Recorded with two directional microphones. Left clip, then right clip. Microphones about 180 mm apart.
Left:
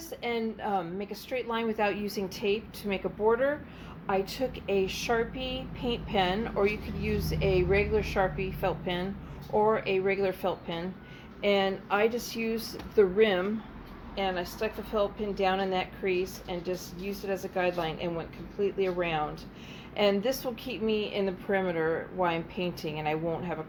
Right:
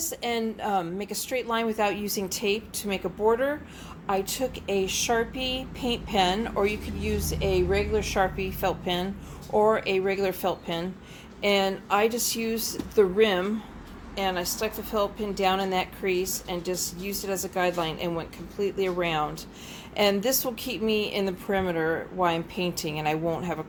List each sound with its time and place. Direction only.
0.0 s a woman's voice: 30° right (ahead or behind)